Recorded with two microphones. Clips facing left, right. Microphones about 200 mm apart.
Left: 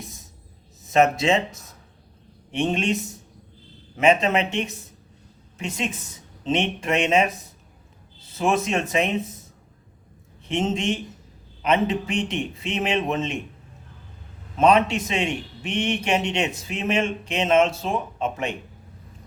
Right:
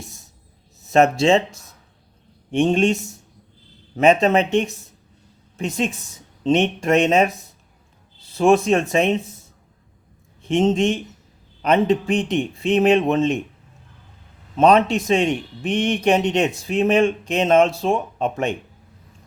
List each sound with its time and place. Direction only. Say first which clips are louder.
0.9 s speech: right 4 dB; 40° right (ahead or behind)
3.9 s speech: right 4 dB; 35° right (ahead or behind)
8.4 s speech: right 7 dB; 35° right (ahead or behind)
10.5 s speech: right 6 dB; 35° right (ahead or behind)
14.6 s speech: right 3 dB; 35° right (ahead or behind)